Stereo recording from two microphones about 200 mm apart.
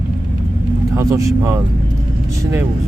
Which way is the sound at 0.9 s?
15° right (ahead or behind).